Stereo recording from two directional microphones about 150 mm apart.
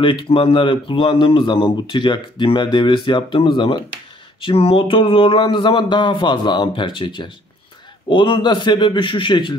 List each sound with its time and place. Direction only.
0.0 s a man's voice: 35° left (ahead or behind)